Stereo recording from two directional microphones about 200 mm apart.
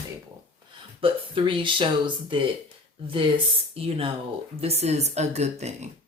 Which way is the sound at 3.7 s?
30° right (ahead or behind).